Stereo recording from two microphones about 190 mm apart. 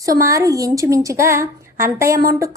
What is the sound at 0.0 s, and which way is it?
A woman's voice, 15° right (ahead or behind).